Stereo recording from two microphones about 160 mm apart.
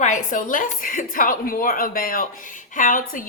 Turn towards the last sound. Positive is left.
turn(degrees=60)  # may be behind; listen again after turning